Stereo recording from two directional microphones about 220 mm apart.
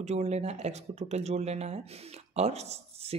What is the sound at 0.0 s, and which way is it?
Speech, 30° right (ahead or behind).